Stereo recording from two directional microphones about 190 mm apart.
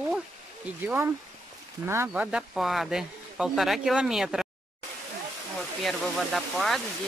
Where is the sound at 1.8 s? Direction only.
15° right (ahead or behind).